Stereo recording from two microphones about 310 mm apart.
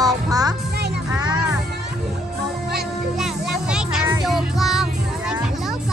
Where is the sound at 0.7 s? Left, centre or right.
Right.